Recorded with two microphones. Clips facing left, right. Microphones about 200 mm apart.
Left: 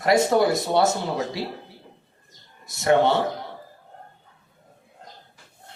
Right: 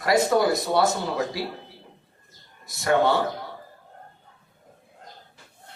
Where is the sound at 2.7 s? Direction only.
25° left (ahead or behind).